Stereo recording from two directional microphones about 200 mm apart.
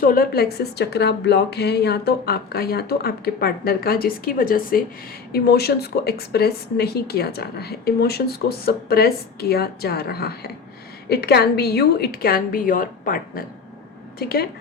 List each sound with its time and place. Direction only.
0.0 s speech: 45° left (ahead or behind)